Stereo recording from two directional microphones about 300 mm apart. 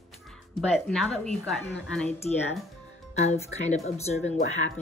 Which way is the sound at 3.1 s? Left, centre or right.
Left.